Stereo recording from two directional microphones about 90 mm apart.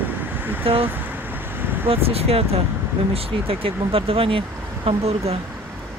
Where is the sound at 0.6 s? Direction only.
90° right.